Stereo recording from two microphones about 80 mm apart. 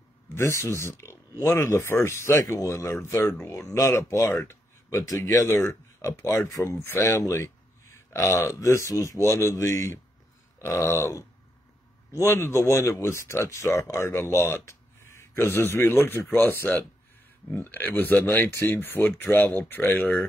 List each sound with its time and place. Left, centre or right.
0.3 s speech: left
5.2 s speech: left
12.3 s speech: left